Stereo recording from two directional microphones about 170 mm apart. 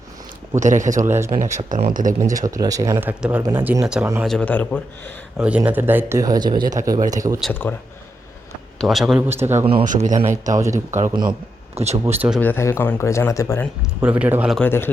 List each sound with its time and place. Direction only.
0.6 s speech: 45° right (ahead or behind)
2.4 s speech: 20° right (ahead or behind)
4.3 s speech: 5° left (ahead or behind)
5.4 s speech: 5° right (ahead or behind)
7.6 s speech: 15° left (ahead or behind)
8.8 s a man's voice: centre (ahead or behind)
9.8 s speech: 50° right (ahead or behind)
11.1 s speech: 25° right (ahead or behind)
12.0 s speech: 10° right (ahead or behind)
12.4 s speech: 15° left (ahead or behind)
14.0 s speech: 10° right (ahead or behind)
14.5 s speech: 10° left (ahead or behind)